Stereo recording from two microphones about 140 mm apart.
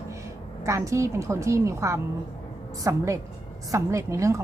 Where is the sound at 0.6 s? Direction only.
20° right (ahead or behind).